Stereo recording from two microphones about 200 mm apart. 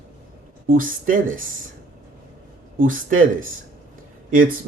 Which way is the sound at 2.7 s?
45° right (ahead or behind).